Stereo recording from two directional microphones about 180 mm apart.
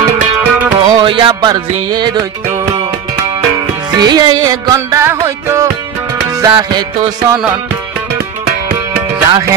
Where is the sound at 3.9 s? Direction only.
25° right (ahead or behind).